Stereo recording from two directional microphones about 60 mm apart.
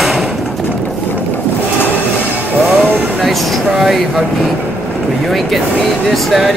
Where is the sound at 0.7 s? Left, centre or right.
Left.